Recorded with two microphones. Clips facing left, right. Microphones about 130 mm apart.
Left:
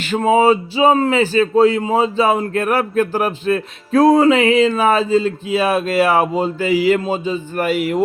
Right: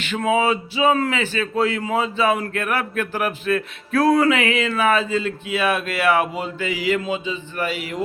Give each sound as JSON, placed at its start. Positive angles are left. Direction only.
{"t": 0.0, "sound": "speech", "side_deg": 35}